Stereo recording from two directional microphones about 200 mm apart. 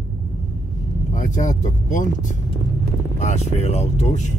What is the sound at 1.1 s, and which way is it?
Speech, 40° left (ahead or behind).